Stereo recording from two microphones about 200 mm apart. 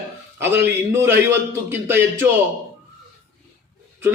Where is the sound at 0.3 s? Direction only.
10° right (ahead or behind).